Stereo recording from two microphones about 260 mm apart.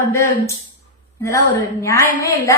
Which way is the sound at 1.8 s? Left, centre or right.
Centre.